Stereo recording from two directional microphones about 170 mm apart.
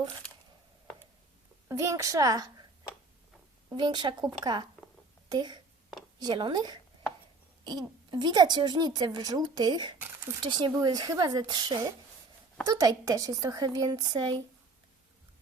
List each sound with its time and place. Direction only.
1.6 s a woman's voice: 15° right (ahead or behind)
3.8 s a woman's voice: 25° right (ahead or behind)